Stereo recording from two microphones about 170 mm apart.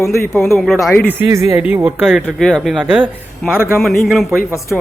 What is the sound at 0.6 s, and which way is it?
Speech, centre (ahead or behind).